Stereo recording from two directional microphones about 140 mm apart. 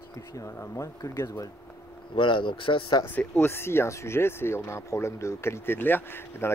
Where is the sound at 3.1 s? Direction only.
10° left (ahead or behind).